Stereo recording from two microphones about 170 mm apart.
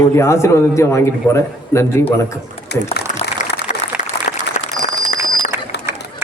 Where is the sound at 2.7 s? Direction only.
80° left.